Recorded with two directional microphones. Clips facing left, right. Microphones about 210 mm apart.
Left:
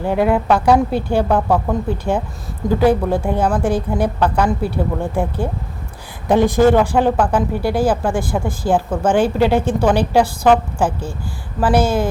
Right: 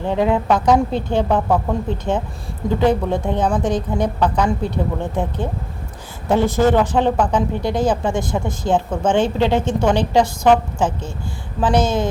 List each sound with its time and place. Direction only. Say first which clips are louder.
0.0 s a woman's voice: left 2 dB; 10° left (ahead or behind)